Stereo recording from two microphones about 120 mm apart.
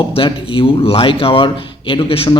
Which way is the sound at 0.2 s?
45° left (ahead or behind).